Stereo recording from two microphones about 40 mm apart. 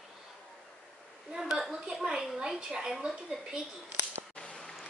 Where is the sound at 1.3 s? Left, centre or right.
Centre.